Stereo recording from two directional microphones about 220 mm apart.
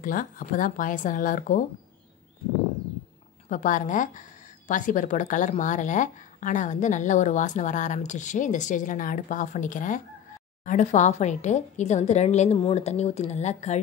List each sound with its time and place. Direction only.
0.0 s speech: 40° left (ahead or behind)
3.4 s speech: 35° left (ahead or behind)